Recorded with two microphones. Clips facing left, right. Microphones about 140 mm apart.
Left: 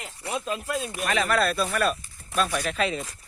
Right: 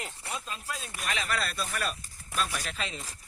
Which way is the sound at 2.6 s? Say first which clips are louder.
Left 11 dB; 80° left.